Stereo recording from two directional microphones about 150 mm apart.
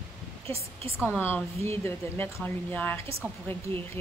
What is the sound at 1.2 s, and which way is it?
Speech, 15° left (ahead or behind).